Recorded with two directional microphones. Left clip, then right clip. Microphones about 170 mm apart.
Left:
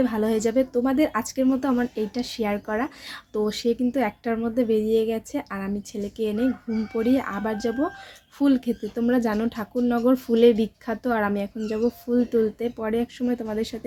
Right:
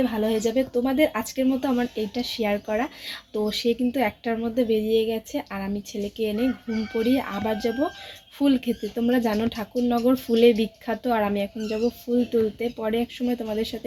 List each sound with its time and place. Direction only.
0.0 s speech: 15° left (ahead or behind)